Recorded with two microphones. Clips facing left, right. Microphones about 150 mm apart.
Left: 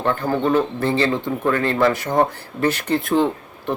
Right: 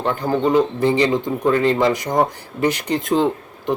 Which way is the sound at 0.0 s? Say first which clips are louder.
Right 1 dB; 15° right (ahead or behind).